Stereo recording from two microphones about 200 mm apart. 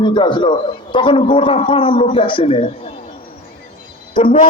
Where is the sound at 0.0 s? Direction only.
25° left (ahead or behind).